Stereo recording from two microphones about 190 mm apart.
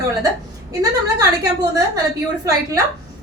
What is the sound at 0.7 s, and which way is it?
Speech, 20° right (ahead or behind).